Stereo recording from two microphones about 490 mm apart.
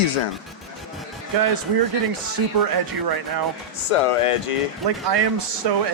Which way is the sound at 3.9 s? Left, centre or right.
Left.